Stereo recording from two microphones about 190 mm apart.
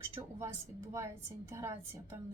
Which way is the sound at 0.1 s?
15° right (ahead or behind).